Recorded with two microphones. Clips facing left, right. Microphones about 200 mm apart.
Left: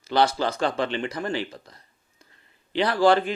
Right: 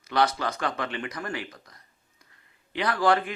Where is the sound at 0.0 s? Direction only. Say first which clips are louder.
Left 3 dB; 30° left (ahead or behind).